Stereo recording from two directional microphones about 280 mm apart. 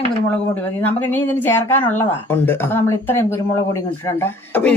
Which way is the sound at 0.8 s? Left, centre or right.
Centre.